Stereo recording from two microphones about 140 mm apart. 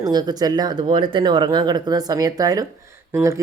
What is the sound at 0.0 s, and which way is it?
Speech, 30° right (ahead or behind).